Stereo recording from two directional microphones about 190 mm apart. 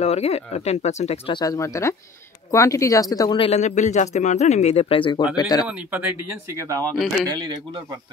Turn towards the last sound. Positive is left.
turn(degrees=-25)  # may be behind; listen again after turning